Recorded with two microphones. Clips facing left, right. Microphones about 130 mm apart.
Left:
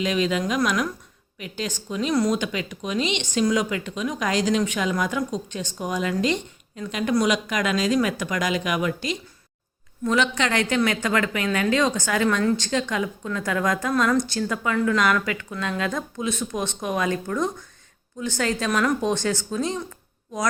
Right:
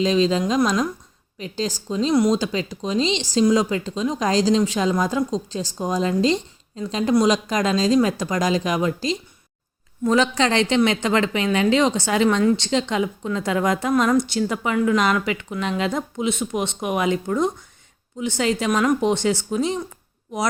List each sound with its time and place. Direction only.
0.0 s a woman's voice: 30° right (ahead or behind)